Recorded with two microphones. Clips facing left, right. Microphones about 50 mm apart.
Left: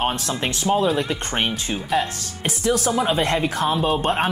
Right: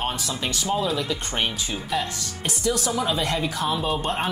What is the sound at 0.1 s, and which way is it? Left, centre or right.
Speech, left.